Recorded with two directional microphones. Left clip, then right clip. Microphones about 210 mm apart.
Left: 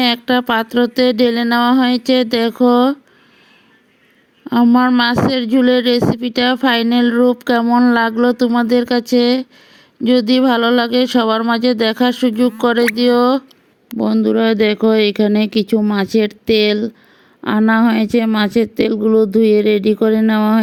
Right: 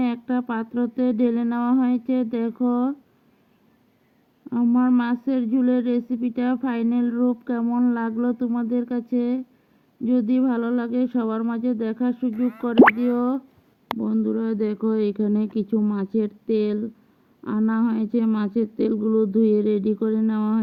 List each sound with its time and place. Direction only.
0.0 s humming: 30° left (ahead or behind)
4.4 s speech: 35° left (ahead or behind)
7.8 s humming: 30° left (ahead or behind)
10.0 s speech: 30° left (ahead or behind)
13.0 s humming: 30° left (ahead or behind)
14.0 s speech: 35° left (ahead or behind)